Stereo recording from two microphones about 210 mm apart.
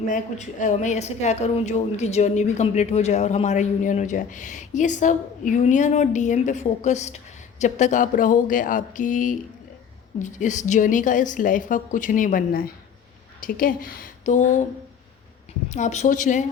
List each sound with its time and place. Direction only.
0.1 s a woman's voice: 35° left (ahead or behind)
15.7 s a woman's voice: 35° left (ahead or behind)